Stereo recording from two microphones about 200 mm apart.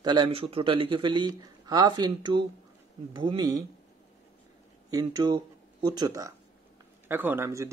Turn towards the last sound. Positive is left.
turn(degrees=-15)  # may be behind; listen again after turning